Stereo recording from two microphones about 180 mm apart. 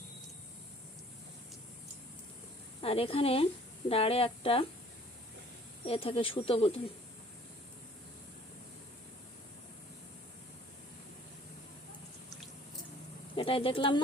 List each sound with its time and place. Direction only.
2.8 s speech: 30° left (ahead or behind)
5.9 s speech: 30° left (ahead or behind)
13.3 s speech: 30° left (ahead or behind)